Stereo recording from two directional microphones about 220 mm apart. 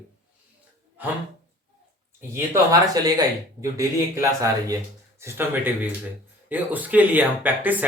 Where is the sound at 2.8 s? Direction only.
15° right (ahead or behind).